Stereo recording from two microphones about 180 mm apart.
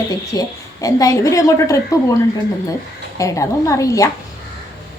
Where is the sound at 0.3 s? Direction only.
20° left (ahead or behind).